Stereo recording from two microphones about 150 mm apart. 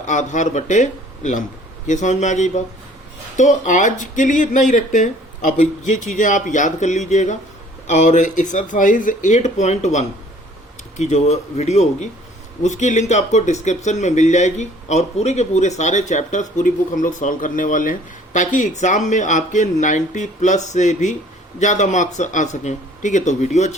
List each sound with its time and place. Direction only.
0.0 s speech: 55° left (ahead or behind)